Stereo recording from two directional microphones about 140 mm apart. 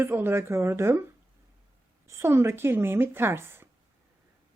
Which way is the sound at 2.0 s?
20° right (ahead or behind).